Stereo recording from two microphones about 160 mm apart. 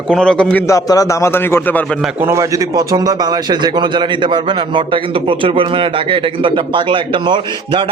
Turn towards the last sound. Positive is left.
turn(degrees=-30)  # may be behind; listen again after turning